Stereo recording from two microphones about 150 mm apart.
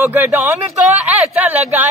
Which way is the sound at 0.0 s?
10° right (ahead or behind).